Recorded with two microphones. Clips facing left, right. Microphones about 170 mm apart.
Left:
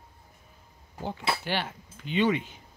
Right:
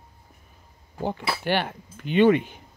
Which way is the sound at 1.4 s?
55° right (ahead or behind).